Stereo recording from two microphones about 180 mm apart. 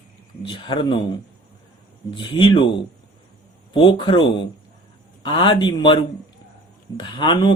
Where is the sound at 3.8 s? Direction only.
25° left (ahead or behind).